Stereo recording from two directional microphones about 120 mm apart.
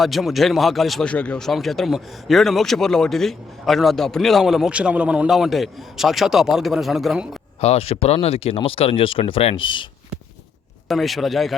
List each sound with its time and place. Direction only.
0.0 s a man's voice: centre (ahead or behind)
7.6 s speech: 60° left (ahead or behind)
10.8 s a man's voice: centre (ahead or behind)